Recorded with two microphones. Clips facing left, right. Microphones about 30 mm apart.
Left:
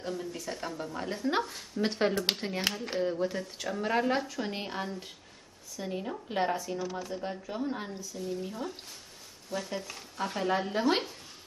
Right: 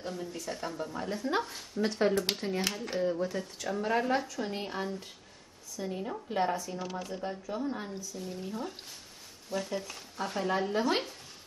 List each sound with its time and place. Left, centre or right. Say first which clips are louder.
0.0 s speech: left 2 dB; centre
1.8 s speech: right 1 dB; left
6.8 s speech: left 2 dB; right
7.2 s speech: right 1 dB; centre
7.9 s speech: left 3 dB; centre
9.8 s speech: left 1 dB; centre